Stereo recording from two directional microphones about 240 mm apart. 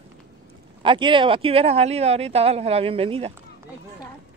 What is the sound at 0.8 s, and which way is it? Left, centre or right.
Speech, right.